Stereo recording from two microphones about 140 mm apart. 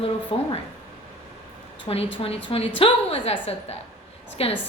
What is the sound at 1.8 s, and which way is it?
A woman's voice, 40° left (ahead or behind).